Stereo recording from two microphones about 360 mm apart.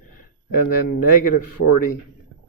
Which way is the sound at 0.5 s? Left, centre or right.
Left.